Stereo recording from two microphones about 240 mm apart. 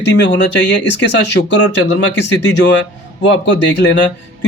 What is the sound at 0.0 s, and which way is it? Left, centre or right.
Speech, left.